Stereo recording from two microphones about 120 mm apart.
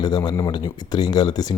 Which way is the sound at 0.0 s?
35° left (ahead or behind).